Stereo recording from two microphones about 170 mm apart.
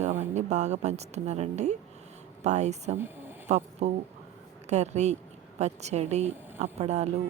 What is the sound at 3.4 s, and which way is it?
A woman's voice, 40° right (ahead or behind).